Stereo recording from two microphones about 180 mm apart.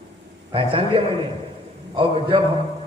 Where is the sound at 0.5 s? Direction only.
30° right (ahead or behind).